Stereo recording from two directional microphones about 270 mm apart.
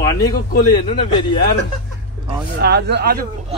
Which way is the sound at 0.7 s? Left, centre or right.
Centre.